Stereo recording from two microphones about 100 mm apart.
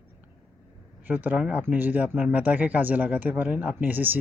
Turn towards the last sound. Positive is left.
turn(degrees=-20)  # may be behind; listen again after turning